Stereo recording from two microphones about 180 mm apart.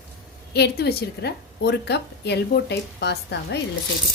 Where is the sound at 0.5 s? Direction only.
65° left (ahead or behind).